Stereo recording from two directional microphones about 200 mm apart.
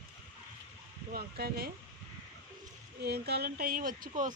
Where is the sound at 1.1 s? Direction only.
50° right (ahead or behind).